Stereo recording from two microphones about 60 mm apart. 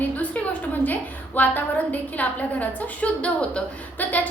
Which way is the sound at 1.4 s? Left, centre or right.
Left.